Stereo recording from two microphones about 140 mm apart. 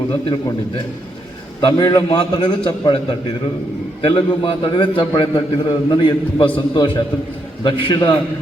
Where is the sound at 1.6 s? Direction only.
30° left (ahead or behind).